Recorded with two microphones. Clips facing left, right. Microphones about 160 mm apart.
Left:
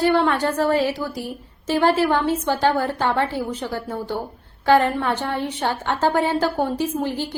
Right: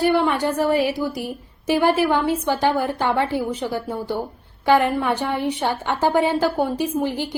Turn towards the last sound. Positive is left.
turn(degrees=-15)  # may be behind; listen again after turning